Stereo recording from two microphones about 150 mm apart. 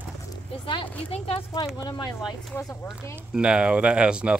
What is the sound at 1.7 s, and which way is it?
Speech, 25° left (ahead or behind).